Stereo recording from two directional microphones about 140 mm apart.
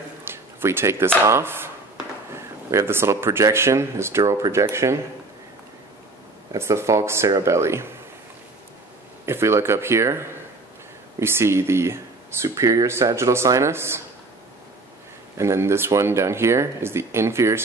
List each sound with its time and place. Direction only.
0.2 s speech: 15° right (ahead or behind)
6.5 s speech: 20° right (ahead or behind)
9.2 s speech: 20° right (ahead or behind)
15.3 s speech: 20° right (ahead or behind)